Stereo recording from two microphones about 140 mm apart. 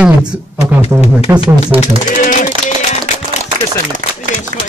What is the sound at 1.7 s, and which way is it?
Speech, 40° right (ahead or behind).